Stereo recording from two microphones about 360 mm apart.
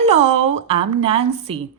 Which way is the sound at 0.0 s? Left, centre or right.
Centre.